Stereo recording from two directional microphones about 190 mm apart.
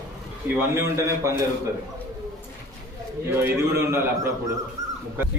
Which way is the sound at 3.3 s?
15° right (ahead or behind).